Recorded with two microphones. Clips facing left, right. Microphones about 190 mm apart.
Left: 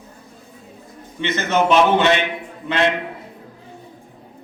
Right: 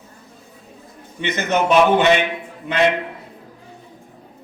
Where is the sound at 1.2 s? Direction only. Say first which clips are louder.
Left 1 dB; 15° right (ahead or behind).